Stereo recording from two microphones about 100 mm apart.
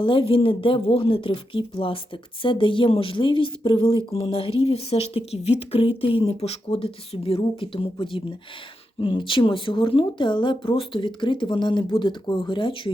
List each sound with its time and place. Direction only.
0.0 s speech: 60° left (ahead or behind)
4.1 s speech: 70° left (ahead or behind)
6.4 s speech: 85° left; by 12.9 s 55° left (ahead or behind)